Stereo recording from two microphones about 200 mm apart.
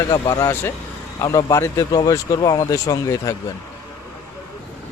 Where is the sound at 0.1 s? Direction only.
15° left (ahead or behind).